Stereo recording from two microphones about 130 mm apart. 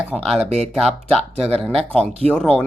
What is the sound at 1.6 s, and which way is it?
Speech, centre (ahead or behind).